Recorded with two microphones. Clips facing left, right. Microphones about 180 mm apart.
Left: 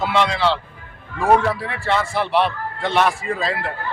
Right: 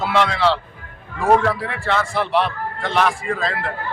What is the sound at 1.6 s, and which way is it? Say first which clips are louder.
Speech: even; 5° left (ahead or behind).